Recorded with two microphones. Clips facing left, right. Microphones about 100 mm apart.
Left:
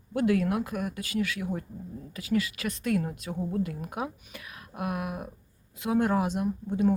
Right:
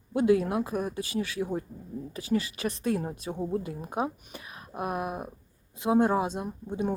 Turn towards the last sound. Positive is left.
turn(degrees=-25)  # may be behind; listen again after turning